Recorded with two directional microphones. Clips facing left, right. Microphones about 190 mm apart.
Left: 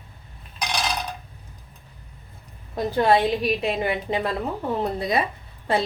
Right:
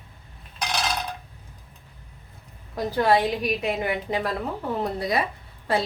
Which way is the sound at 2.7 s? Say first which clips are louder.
Left 2 dB; 25° left (ahead or behind).